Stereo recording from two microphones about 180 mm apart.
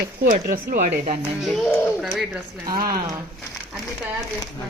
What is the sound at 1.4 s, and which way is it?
Speech, centre (ahead or behind).